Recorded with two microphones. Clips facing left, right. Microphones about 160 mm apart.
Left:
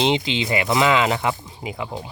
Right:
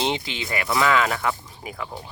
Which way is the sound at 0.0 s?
20° left (ahead or behind).